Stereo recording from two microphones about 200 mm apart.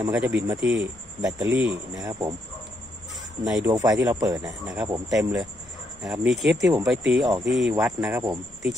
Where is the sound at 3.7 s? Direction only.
15° right (ahead or behind).